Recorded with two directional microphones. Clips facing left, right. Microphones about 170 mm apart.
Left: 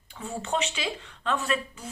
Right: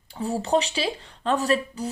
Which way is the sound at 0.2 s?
35° right (ahead or behind).